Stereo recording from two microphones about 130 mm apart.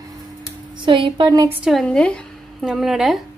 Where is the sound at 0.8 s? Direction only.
40° right (ahead or behind).